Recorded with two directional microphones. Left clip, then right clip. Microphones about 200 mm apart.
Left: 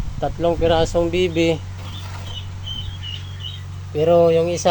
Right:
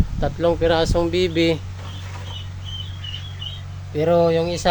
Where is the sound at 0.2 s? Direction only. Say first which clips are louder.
Even; 15° right (ahead or behind).